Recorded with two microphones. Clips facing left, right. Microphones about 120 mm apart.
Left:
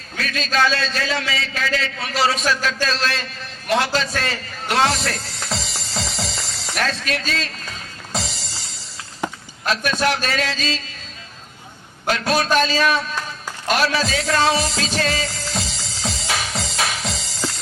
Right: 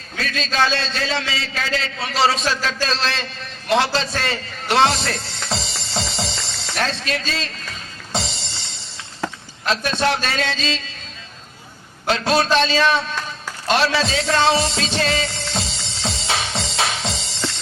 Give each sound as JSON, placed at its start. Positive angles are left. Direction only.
{"t": 0.2, "sound": "a man's voice", "side_deg": -30}
{"t": 3.7, "sound": "music", "side_deg": -25}
{"t": 9.2, "sound": "a sound", "side_deg": 20}
{"t": 9.6, "sound": "a man's voice", "side_deg": -25}
{"t": 12.0, "sound": "a man's voice", "side_deg": -25}
{"t": 13.7, "sound": "music", "side_deg": -30}